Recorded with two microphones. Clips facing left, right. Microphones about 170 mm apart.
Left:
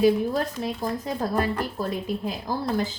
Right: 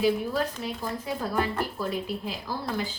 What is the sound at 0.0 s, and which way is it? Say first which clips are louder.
Speech: left 4 dB; 40° left (ahead or behind).